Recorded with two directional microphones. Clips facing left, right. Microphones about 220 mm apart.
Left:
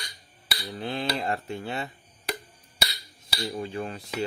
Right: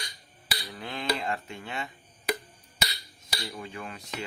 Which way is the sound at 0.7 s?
35° left (ahead or behind).